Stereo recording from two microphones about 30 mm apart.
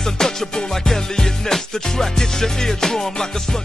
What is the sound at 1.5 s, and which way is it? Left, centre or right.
Music, centre.